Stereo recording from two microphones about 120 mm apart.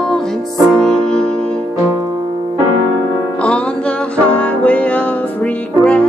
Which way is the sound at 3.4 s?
10° left (ahead or behind).